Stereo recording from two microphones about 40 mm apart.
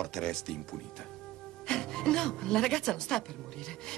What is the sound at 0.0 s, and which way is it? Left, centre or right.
Speech, centre.